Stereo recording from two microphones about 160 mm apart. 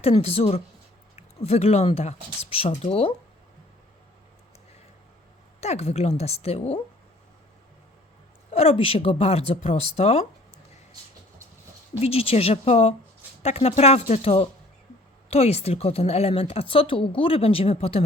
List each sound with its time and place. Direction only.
0.0 s a woman's voice: 40° left (ahead or behind)
5.5 s a woman's voice: 45° left (ahead or behind)
8.5 s a woman's voice: 35° left (ahead or behind)
11.9 s a woman's voice: 40° left (ahead or behind)